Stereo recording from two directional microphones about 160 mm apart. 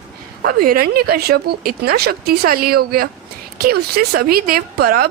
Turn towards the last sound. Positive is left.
turn(degrees=-70)  # may be behind; listen again after turning